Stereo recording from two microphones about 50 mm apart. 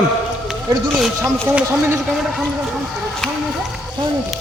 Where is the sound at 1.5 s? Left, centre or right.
Right.